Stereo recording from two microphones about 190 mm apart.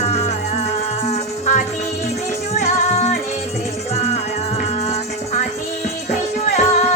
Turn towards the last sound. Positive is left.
turn(degrees=35)  # may be behind; listen again after turning